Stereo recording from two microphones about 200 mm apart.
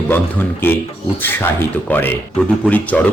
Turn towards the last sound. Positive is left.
turn(degrees=5)  # may be behind; listen again after turning